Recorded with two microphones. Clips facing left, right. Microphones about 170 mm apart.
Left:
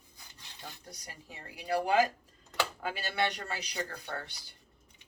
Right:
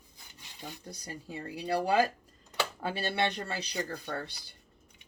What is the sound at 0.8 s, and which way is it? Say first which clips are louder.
Speech: right 4 dB; 30° right (ahead or behind).